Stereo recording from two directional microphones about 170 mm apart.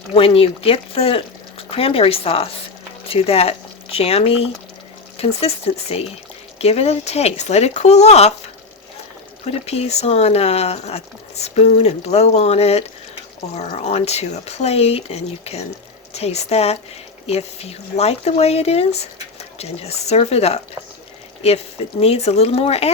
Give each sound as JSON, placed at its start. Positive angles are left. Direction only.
{"t": 0.1, "sound": "speech", "side_deg": 35}
{"t": 9.5, "sound": "speech", "side_deg": 40}
{"t": 22.0, "sound": "speech", "side_deg": 35}